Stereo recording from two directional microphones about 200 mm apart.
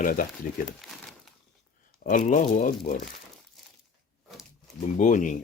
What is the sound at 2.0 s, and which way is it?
Speech, 40° left (ahead or behind).